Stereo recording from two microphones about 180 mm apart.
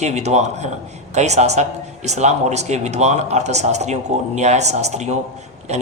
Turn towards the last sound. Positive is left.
turn(degrees=-40)  # may be behind; listen again after turning